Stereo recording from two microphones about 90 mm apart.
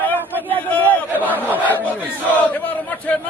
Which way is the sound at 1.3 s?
20° right (ahead or behind).